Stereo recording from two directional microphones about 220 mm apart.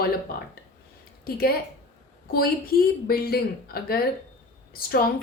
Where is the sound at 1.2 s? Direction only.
45° left (ahead or behind).